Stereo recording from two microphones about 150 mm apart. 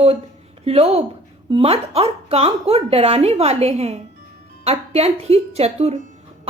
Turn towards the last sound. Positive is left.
turn(degrees=-45)  # may be behind; listen again after turning